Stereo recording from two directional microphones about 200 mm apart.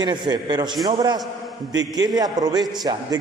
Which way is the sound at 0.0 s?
20° right (ahead or behind).